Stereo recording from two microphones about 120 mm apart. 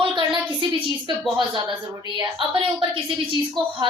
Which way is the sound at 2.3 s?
45° right (ahead or behind).